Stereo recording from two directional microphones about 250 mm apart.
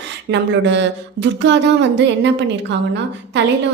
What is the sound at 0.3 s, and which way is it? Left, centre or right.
A woman's voice, right.